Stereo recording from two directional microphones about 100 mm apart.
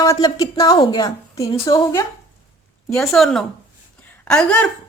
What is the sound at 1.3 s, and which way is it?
Speech, 40° left (ahead or behind).